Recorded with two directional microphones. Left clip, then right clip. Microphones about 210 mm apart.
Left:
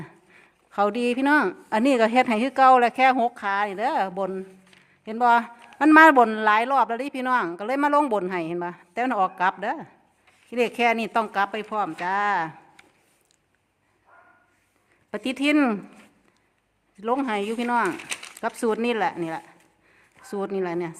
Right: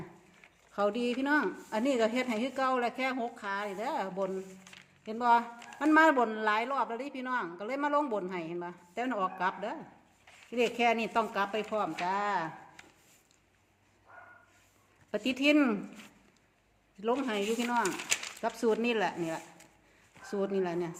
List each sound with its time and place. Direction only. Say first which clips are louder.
0.7 s a woman's voice: left 8 dB; 45° left (ahead or behind)
15.1 s speech: left 4 dB; 40° left (ahead or behind)
17.0 s speech: left 7 dB; 40° left (ahead or behind)